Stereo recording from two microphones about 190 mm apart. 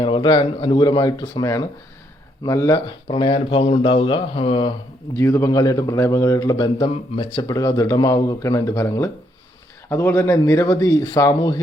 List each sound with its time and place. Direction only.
0.0 s a man's voice: 25° left (ahead or behind)
5.1 s a man's voice: 15° left (ahead or behind)